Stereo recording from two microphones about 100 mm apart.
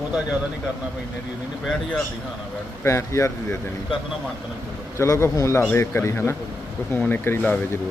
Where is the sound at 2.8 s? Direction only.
30° left (ahead or behind).